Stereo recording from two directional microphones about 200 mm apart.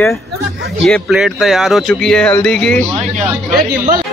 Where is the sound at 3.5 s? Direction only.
45° right (ahead or behind).